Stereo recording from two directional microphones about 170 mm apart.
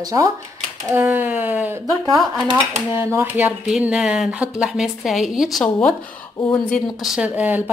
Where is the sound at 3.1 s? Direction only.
15° right (ahead or behind).